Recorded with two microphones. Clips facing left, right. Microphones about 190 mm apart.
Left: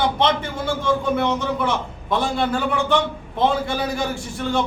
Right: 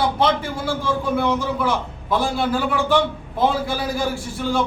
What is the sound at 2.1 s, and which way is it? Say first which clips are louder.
A man's voice: right 1 dB; 5° right (ahead or behind).